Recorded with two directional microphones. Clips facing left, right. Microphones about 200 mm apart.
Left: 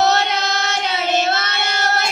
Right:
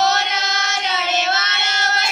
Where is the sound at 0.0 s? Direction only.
60° left (ahead or behind).